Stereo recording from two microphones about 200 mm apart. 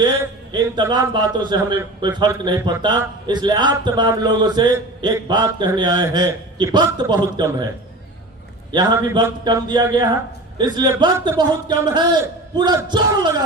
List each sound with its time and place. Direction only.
0.5 s a man's voice: 20° right (ahead or behind)
8.7 s a man's voice: 20° right (ahead or behind)